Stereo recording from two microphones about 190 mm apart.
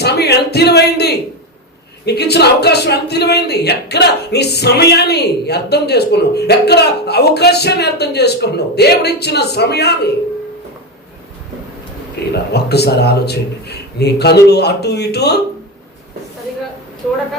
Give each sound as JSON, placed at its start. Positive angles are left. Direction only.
{"t": 0.0, "sound": "music", "side_deg": 60}
{"t": 2.0, "sound": "speech", "side_deg": 60}
{"t": 12.3, "sound": "speech", "side_deg": 60}